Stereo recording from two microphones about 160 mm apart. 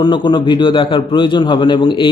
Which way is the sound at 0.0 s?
30° left (ahead or behind).